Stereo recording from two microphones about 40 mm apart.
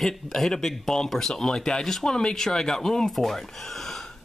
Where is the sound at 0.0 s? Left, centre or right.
Centre.